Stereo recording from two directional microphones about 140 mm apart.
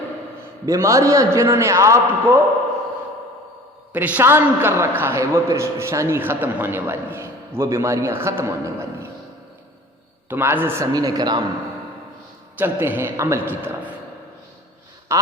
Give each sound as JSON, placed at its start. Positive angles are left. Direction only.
{"t": 0.6, "sound": "a man's voice", "side_deg": -25}
{"t": 3.9, "sound": "a man's voice", "side_deg": -10}
{"t": 10.2, "sound": "a man's voice", "side_deg": -15}
{"t": 10.9, "sound": "a man's voice", "side_deg": -30}
{"t": 12.5, "sound": "a man's voice", "side_deg": -15}
{"t": 15.1, "sound": "a sound", "side_deg": -20}